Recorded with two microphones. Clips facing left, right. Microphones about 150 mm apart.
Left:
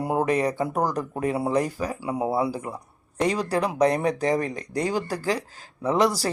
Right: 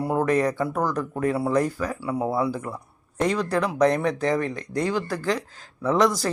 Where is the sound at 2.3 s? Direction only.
30° left (ahead or behind).